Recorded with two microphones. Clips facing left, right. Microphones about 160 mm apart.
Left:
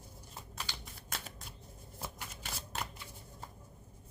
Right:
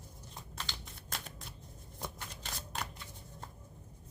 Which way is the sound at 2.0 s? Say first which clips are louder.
Right 1 dB; 5° left (ahead or behind).